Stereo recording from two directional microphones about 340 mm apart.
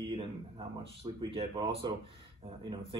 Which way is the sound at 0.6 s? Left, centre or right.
Centre.